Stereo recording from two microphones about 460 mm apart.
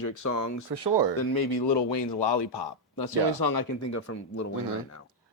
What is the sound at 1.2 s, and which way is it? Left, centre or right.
Speech, left.